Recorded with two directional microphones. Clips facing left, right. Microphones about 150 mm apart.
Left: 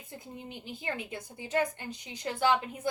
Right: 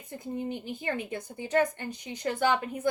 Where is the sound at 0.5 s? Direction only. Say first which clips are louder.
Right 5 dB; 50° right (ahead or behind).